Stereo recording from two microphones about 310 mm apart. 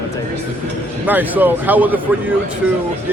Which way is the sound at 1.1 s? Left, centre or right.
Centre.